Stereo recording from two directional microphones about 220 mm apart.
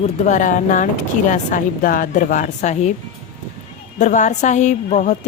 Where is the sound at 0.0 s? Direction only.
35° left (ahead or behind).